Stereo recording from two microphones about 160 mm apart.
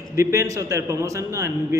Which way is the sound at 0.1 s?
20° right (ahead or behind).